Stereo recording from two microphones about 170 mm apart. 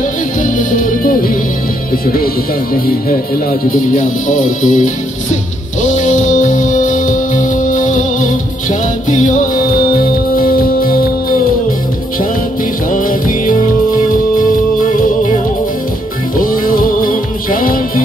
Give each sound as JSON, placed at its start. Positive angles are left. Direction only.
{"t": 0.4, "sound": "music", "side_deg": 50}
{"t": 3.7, "sound": "music", "side_deg": 50}
{"t": 12.9, "sound": "music", "side_deg": 50}
{"t": 16.3, "sound": "music", "side_deg": 55}